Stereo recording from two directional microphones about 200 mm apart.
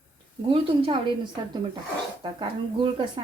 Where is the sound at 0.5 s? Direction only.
25° right (ahead or behind).